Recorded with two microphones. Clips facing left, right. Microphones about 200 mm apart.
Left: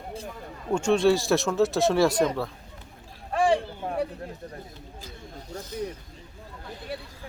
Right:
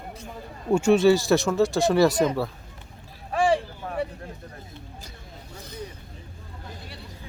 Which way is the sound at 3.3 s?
Centre (ahead or behind).